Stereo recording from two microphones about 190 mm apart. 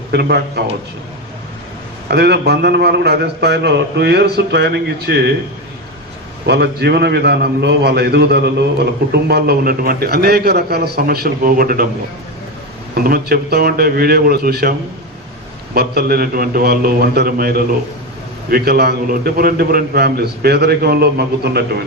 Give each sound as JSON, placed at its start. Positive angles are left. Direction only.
{"t": 0.1, "sound": "a man's voice", "side_deg": -60}
{"t": 2.0, "sound": "a man's voice", "side_deg": -60}
{"t": 6.4, "sound": "a man's voice", "side_deg": -60}
{"t": 12.9, "sound": "a man's voice", "side_deg": -50}
{"t": 15.7, "sound": "a man's voice", "side_deg": -55}